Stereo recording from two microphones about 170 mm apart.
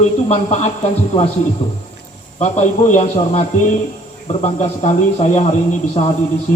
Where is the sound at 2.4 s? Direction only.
40° left (ahead or behind).